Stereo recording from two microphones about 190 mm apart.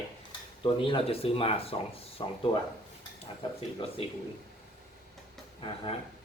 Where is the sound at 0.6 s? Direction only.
25° left (ahead or behind).